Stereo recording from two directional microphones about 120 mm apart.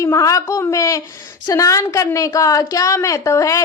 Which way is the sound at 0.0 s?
25° left (ahead or behind).